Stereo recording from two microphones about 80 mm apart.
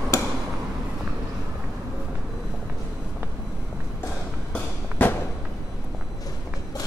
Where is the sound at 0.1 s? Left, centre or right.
Left.